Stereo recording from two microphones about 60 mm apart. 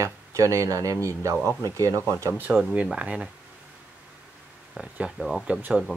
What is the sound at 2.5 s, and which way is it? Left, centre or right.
Speech, right.